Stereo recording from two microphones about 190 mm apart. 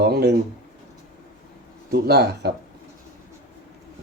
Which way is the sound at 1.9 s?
55° right (ahead or behind).